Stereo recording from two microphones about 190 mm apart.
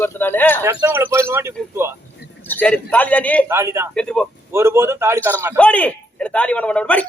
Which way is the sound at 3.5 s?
15° right (ahead or behind).